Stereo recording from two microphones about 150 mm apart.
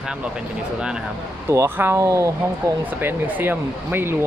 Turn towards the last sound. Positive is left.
turn(degrees=-15)  # may be behind; listen again after turning